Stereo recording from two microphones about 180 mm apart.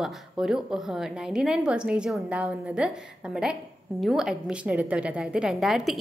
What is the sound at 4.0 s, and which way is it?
A woman's voice, 5° right (ahead or behind).